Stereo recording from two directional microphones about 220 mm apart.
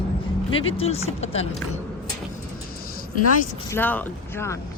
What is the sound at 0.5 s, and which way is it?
Speech, 25° left (ahead or behind).